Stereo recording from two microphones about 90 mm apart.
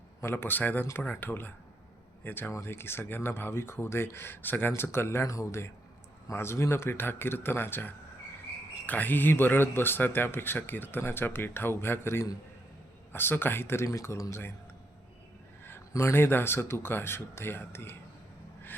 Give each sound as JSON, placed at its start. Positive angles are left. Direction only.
{"t": 0.2, "sound": "speech", "side_deg": 25}
{"t": 15.9, "sound": "speech", "side_deg": 30}